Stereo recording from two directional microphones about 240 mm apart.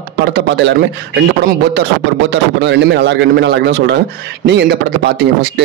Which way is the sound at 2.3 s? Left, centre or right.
Right.